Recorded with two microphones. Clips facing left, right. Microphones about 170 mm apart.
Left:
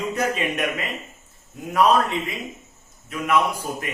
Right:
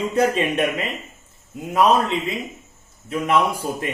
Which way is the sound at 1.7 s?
20° right (ahead or behind).